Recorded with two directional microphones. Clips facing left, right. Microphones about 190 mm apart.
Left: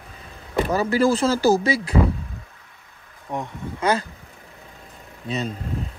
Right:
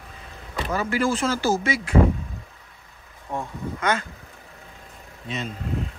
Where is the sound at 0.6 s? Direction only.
35° left (ahead or behind).